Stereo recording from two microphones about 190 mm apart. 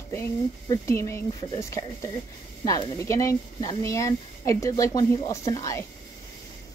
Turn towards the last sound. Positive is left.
turn(degrees=20)  # may be behind; listen again after turning